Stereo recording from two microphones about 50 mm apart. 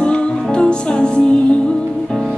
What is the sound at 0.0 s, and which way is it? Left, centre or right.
Music, left.